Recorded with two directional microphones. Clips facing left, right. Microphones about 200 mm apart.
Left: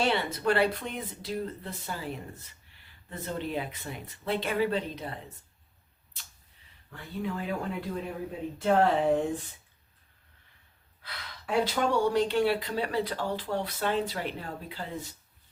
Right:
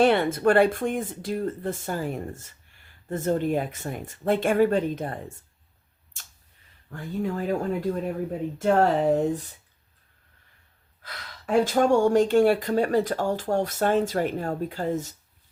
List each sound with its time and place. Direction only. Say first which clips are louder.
0.0 s speech: right 8 dB; 50° right (ahead or behind)
6.9 s speech: right 6 dB; 45° right (ahead or behind)
11.0 s speech: right 4 dB; 45° right (ahead or behind)